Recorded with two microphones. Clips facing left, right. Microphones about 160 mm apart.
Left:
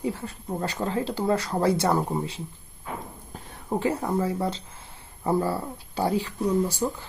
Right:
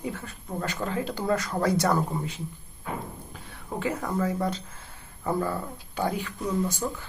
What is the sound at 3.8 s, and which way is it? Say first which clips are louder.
A woman's voice: left 2 dB; 30° left (ahead or behind).